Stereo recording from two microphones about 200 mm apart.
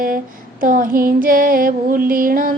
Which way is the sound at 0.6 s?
45° right (ahead or behind).